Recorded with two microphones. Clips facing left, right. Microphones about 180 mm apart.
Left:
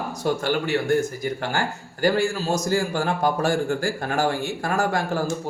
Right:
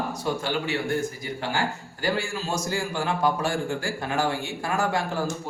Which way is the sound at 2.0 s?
40° left (ahead or behind).